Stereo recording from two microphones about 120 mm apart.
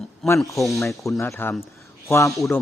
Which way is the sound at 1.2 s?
20° left (ahead or behind).